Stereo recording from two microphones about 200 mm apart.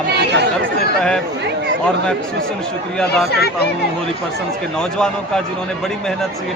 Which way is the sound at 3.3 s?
55° left (ahead or behind).